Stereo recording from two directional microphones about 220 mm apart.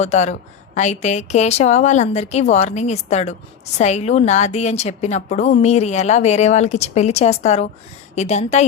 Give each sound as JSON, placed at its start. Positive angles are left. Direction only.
{"t": 0.0, "sound": "a woman's voice", "side_deg": 30}